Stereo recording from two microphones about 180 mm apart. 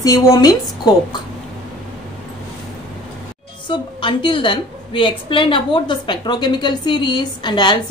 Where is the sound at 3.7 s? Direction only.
25° left (ahead or behind).